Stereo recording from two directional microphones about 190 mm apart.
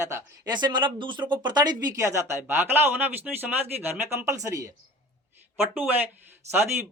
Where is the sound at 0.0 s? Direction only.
15° right (ahead or behind).